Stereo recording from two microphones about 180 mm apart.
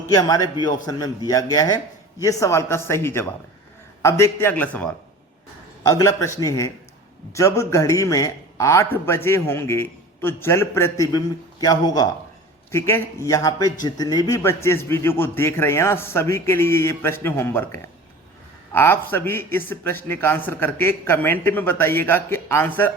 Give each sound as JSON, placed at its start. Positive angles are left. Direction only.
{"t": 0.1, "sound": "a man's voice", "side_deg": 20}